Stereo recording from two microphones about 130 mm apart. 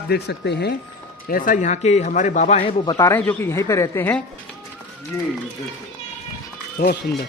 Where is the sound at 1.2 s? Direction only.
90° left; by 2.6 s 70° left (ahead or behind).